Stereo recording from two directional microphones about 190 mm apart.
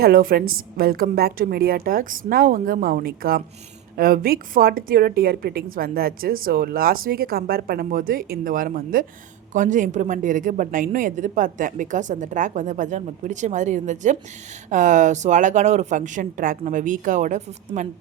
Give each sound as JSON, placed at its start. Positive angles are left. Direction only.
{"t": 0.0, "sound": "a woman's voice", "side_deg": -50}